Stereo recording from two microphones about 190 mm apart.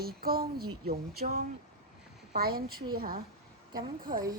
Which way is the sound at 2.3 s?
55° right (ahead or behind).